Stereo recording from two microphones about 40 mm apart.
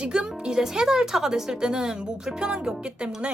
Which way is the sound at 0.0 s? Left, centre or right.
Centre.